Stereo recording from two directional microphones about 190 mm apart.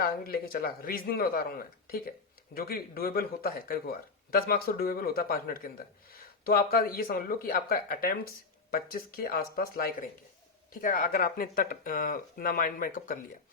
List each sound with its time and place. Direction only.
0.0 s speech: 50° left (ahead or behind)